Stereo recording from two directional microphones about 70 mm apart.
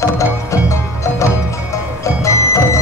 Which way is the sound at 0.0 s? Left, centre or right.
Left.